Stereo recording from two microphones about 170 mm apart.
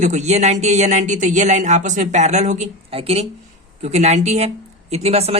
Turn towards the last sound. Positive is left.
turn(degrees=-35)  # may be behind; listen again after turning